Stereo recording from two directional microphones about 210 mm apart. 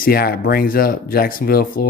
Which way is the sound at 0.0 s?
45° left (ahead or behind).